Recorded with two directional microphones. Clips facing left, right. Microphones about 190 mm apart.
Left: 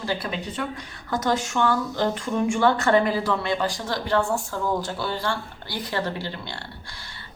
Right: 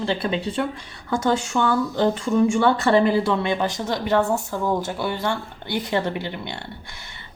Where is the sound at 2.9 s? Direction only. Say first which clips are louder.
Right 3 dB; 25° right (ahead or behind).